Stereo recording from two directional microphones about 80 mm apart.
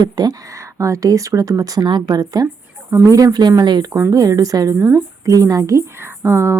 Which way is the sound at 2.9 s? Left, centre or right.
Right.